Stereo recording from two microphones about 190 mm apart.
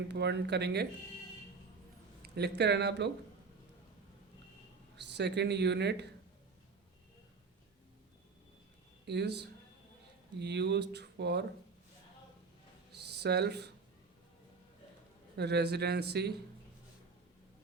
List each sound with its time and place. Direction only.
0.1 s speech: 65° right (ahead or behind)
2.2 s speech: 60° right (ahead or behind)
4.9 s speech: 65° right (ahead or behind)
9.0 s speech: 60° right (ahead or behind)
12.9 s a sound: 60° right (ahead or behind)
15.4 s speech: 60° right (ahead or behind)